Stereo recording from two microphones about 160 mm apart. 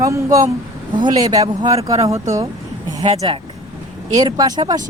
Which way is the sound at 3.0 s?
30° right (ahead or behind).